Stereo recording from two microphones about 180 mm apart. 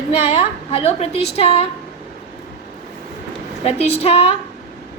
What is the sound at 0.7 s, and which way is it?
Speech, 35° left (ahead or behind).